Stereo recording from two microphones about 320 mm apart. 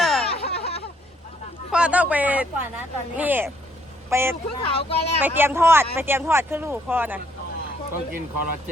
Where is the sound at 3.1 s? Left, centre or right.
Centre.